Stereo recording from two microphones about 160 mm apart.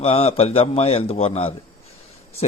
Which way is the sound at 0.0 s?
40° left (ahead or behind).